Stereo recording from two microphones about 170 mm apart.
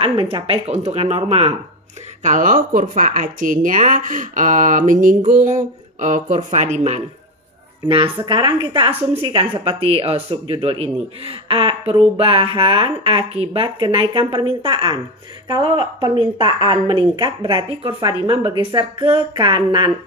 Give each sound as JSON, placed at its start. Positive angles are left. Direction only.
{"t": 0.0, "sound": "speech", "side_deg": -35}
{"t": 2.2, "sound": "speech", "side_deg": -50}
{"t": 7.9, "sound": "a woman's voice", "side_deg": -30}